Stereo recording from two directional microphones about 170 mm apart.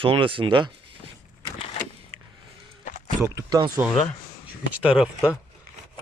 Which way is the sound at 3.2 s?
20° right (ahead or behind).